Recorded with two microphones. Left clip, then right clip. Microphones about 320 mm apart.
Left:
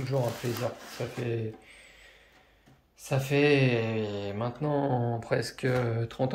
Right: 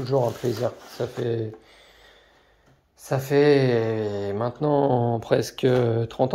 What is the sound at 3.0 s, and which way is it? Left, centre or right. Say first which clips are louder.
Speech: right 6 dB; centre.